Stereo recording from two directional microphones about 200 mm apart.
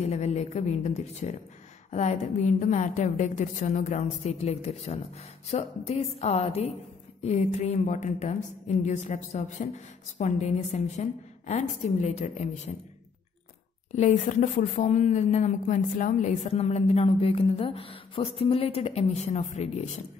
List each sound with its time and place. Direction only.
0.0 s speech: 35° left (ahead or behind)
13.9 s speech: 35° left (ahead or behind)